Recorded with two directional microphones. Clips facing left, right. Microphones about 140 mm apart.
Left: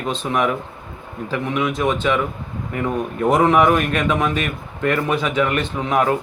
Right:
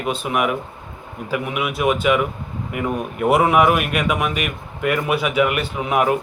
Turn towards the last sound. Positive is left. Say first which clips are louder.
# even
turn(degrees=-15)  # may be behind; listen again after turning